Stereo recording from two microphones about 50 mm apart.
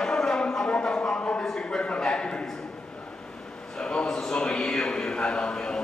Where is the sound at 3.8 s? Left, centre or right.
Centre.